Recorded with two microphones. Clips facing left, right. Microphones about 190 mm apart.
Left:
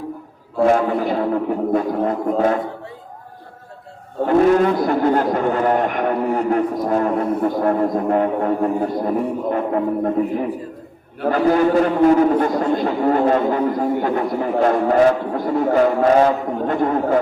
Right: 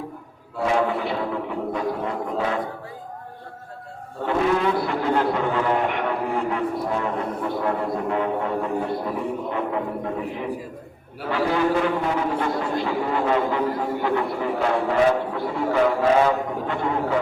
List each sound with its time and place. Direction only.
0.6 s speech: 45° left (ahead or behind)
4.3 s speech: 45° left (ahead or behind)